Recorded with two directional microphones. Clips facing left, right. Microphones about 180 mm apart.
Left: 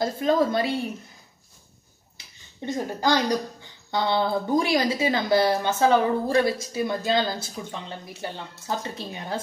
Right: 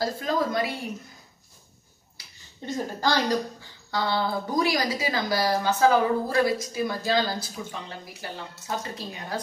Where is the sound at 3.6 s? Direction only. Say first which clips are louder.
Left 2 dB; 20° left (ahead or behind).